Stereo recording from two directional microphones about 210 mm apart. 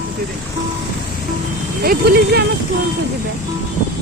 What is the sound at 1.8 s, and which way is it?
Speech, 45° right (ahead or behind).